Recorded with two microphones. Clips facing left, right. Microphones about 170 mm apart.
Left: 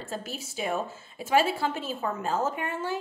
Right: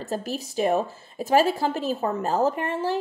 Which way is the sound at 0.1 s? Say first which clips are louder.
Right 8 dB; 40° right (ahead or behind).